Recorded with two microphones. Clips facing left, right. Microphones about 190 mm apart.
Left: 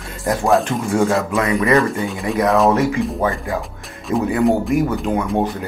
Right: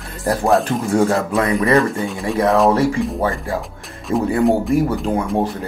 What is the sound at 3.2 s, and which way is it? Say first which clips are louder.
Speech: even; 30° right (ahead or behind).